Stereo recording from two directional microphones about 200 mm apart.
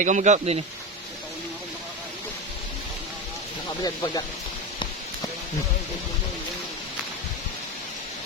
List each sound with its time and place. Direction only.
0.0 s speech: 40° right (ahead or behind)
3.8 s speech: 20° left (ahead or behind)